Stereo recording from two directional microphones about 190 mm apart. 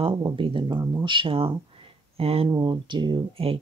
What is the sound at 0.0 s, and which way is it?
Speech, 25° right (ahead or behind).